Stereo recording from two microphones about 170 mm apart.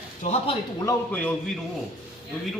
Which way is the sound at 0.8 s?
10° left (ahead or behind).